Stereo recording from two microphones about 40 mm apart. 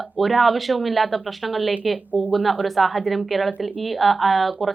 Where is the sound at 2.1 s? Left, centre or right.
Right.